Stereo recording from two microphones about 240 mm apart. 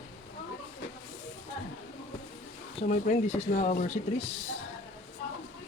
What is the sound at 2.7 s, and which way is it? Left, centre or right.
Speech, left.